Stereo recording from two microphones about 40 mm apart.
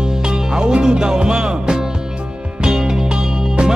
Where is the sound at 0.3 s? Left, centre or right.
Centre.